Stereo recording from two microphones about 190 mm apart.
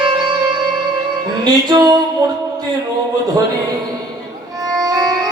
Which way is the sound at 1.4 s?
20° right (ahead or behind).